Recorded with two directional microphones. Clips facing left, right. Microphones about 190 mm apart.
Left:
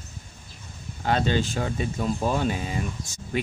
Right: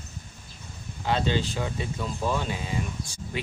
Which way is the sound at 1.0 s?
50° left (ahead or behind).